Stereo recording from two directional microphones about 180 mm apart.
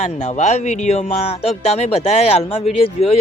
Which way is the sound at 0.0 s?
40° left (ahead or behind).